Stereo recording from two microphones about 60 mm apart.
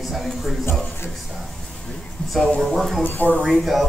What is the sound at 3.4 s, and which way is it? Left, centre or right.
Speech, centre.